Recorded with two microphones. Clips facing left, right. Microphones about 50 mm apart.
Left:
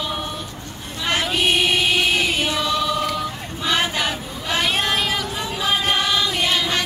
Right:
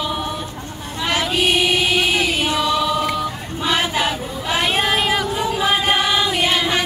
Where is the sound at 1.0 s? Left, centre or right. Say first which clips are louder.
Right 2 dB; centre.